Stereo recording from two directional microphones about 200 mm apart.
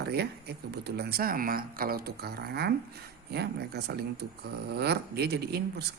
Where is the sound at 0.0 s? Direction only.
55° right (ahead or behind).